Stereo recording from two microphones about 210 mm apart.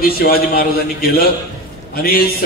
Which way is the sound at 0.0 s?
45° left (ahead or behind).